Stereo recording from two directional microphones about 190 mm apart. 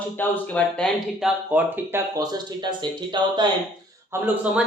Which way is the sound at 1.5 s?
15° right (ahead or behind).